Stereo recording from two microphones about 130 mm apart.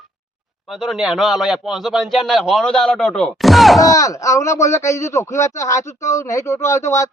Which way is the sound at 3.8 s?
25° left (ahead or behind).